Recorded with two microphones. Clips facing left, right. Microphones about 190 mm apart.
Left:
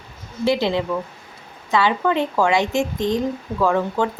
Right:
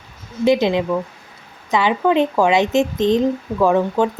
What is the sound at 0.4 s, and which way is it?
A woman's voice, 20° right (ahead or behind).